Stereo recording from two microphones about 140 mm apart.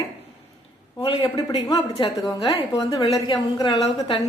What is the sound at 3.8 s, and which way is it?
Speech, 45° left (ahead or behind).